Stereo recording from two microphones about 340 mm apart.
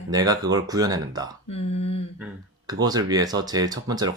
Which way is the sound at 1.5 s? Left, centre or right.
Centre.